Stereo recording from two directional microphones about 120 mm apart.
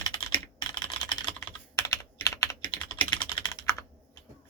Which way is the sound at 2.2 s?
25° left (ahead or behind).